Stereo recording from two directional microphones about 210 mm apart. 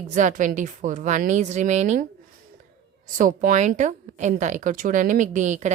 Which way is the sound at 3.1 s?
40° right (ahead or behind).